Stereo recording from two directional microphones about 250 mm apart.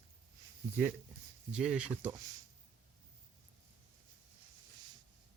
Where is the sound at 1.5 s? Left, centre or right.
Centre.